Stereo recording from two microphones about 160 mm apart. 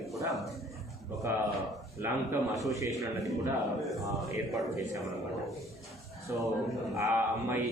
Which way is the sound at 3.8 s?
Centre (ahead or behind).